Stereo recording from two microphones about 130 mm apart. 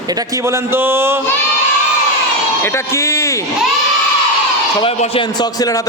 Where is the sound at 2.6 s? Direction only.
20° left (ahead or behind).